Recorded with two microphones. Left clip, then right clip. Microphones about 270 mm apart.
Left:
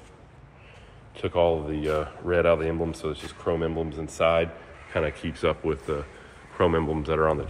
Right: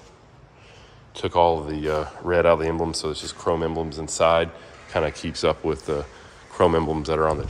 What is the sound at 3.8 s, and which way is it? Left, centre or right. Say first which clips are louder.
Speech: right 2 dB; right.